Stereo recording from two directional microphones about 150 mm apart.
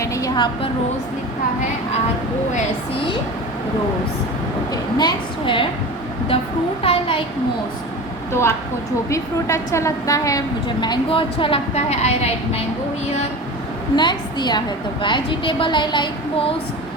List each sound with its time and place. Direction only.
0.0 s a woman's voice: 20° left (ahead or behind)
4.7 s a woman's voice: 30° left (ahead or behind)
8.3 s a woman's voice: 15° left (ahead or behind); by 12.3 s 45° left (ahead or behind)
13.9 s a woman's voice: 30° left (ahead or behind)